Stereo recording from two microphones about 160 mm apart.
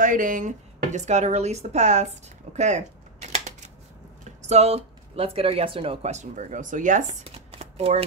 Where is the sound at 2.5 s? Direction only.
45° right (ahead or behind).